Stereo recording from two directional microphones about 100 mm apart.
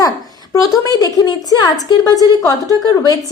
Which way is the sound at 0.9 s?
40° left (ahead or behind).